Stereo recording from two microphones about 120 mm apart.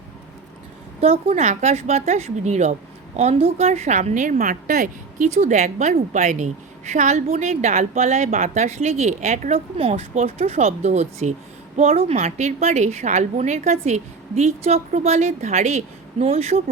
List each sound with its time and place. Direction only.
1.0 s a woman's voice: 60° right (ahead or behind)
3.2 s a woman's voice: 65° right (ahead or behind)
11.8 s a woman's voice: 60° right (ahead or behind)